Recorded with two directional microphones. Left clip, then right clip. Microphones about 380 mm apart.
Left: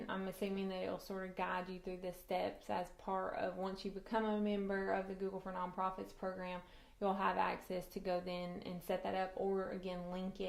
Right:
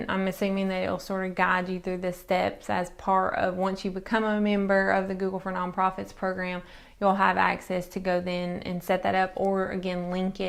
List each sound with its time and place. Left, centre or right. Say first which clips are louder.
0.1 s a woman's voice: right 14 dB; right